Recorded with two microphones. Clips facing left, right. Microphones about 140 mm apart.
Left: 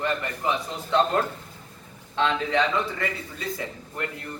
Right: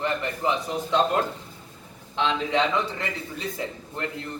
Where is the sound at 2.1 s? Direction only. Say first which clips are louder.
Even; 20° right (ahead or behind).